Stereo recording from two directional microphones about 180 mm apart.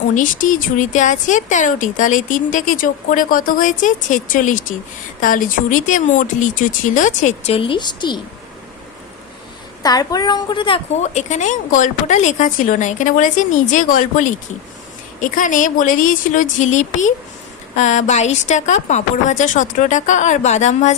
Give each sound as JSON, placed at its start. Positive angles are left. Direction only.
{"t": 0.1, "sound": "speech", "side_deg": 45}
{"t": 9.8, "sound": "a child's voice", "side_deg": 20}
{"t": 11.0, "sound": "a woman's voice", "side_deg": 40}